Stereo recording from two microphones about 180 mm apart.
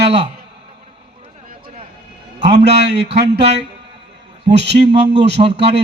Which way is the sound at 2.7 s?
70° right (ahead or behind).